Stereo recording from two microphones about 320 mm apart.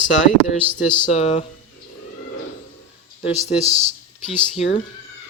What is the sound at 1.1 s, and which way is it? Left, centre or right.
Speech, centre.